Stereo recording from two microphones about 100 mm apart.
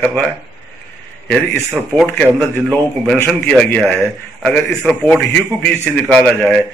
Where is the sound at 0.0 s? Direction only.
5° left (ahead or behind).